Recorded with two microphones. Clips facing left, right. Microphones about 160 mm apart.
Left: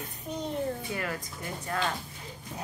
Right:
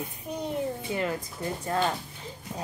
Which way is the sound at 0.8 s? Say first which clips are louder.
Right 4 dB; 20° right (ahead or behind).